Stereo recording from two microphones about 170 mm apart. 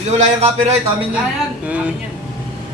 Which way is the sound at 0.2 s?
40° right (ahead or behind).